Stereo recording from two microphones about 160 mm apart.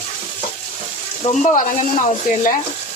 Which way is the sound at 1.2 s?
45° left (ahead or behind).